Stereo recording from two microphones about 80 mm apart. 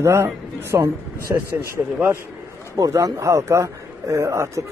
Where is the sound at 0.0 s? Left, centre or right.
Right.